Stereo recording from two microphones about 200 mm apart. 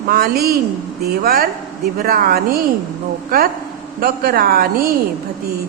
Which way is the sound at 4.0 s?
45° right (ahead or behind).